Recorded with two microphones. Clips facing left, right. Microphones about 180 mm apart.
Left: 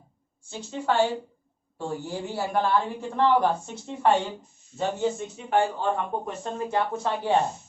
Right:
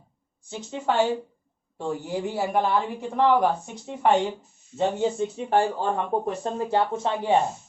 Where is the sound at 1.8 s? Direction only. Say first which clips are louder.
Right 3 dB; 15° right (ahead or behind).